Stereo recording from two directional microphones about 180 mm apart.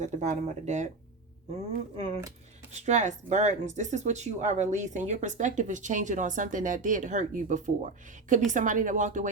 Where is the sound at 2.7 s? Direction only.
40° right (ahead or behind).